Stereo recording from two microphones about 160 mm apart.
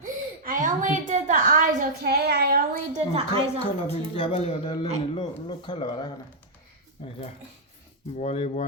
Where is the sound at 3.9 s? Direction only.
35° left (ahead or behind).